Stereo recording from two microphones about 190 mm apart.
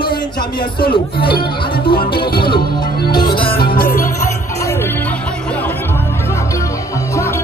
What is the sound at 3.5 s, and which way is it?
Music, 55° left (ahead or behind).